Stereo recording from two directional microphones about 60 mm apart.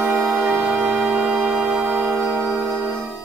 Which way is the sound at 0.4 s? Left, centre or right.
Right.